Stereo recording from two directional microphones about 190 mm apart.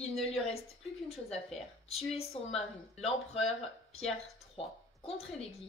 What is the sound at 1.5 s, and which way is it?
Speech, centre (ahead or behind).